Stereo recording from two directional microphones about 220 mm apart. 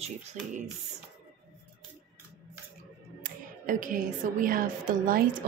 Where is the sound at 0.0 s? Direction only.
30° right (ahead or behind).